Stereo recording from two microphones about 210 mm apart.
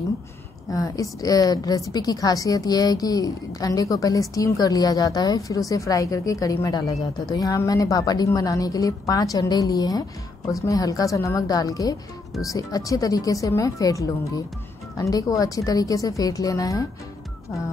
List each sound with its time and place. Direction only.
0.7 s a woman's voice: 15° left (ahead or behind)